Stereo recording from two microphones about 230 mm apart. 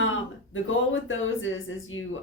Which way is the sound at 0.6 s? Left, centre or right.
Left.